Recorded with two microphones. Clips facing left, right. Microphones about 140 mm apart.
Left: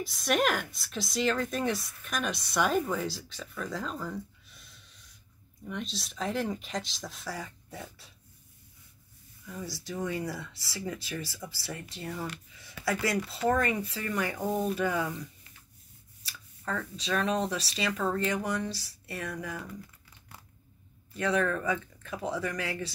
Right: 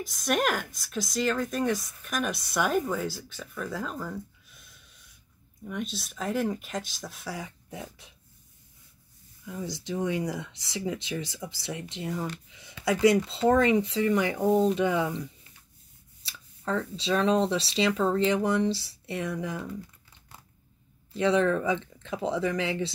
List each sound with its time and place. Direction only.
0.1 s speech: centre (ahead or behind)
5.9 s speech: 5° right (ahead or behind)
9.5 s speech: 20° right (ahead or behind)
16.3 s speech: 25° right (ahead or behind)
21.1 s speech: 25° right (ahead or behind)